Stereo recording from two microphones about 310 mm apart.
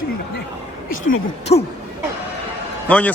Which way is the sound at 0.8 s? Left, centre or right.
Left.